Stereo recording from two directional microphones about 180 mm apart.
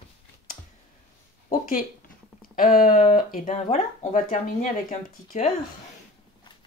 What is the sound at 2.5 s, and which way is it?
Speech, 50° left (ahead or behind).